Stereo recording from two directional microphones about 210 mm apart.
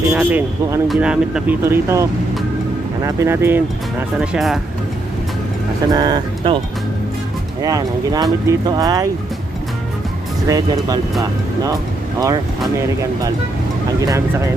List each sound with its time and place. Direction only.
0.1 s speech: 5° right (ahead or behind)
5.9 s speech: 20° right (ahead or behind)
7.6 s speech: 15° right (ahead or behind)
10.5 s speech: 20° right (ahead or behind)
14.0 s speech: 15° right (ahead or behind)